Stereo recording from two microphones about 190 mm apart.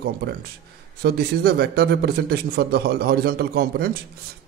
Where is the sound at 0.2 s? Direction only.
60° right (ahead or behind).